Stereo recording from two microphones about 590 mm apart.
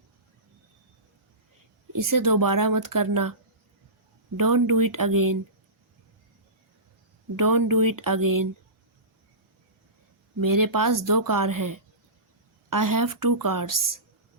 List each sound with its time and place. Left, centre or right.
1.9 s speech: right
4.4 s speech: right
7.3 s speech: right
10.4 s speech: right